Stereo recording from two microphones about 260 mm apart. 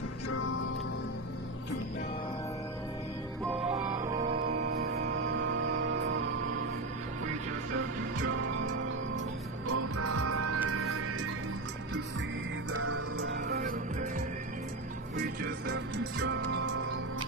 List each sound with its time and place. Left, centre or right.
4.2 s music: right
8.5 s music: right
13.5 s music: right
15.1 s music: right